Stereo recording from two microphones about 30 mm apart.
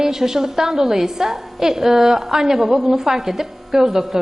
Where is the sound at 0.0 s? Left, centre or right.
Centre.